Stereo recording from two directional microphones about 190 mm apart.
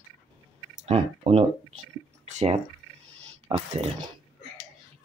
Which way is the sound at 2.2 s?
40° right (ahead or behind).